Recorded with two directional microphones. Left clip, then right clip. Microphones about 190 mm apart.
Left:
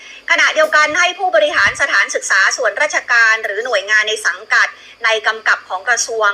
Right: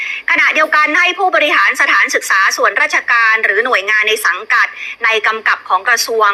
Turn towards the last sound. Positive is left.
turn(degrees=-15)  # may be behind; listen again after turning